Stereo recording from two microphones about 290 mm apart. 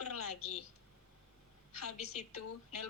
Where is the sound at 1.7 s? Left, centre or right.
Left.